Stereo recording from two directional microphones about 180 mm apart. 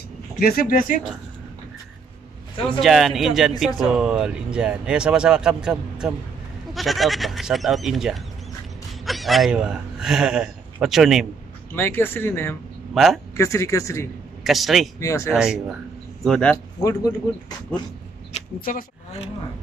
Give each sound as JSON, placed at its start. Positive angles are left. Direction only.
{"t": 0.4, "sound": "speech", "side_deg": 55}
{"t": 2.8, "sound": "speech", "side_deg": 0}
{"t": 11.7, "sound": "speech", "side_deg": 10}
{"t": 12.9, "sound": "speech", "side_deg": 0}
{"t": 13.4, "sound": "speech", "side_deg": 15}
{"t": 14.4, "sound": "speech", "side_deg": 0}
{"t": 15.0, "sound": "speech", "side_deg": 15}
{"t": 15.3, "sound": "speech", "side_deg": -5}
{"t": 16.8, "sound": "speech", "side_deg": 20}
{"t": 18.3, "sound": "a sound", "side_deg": 35}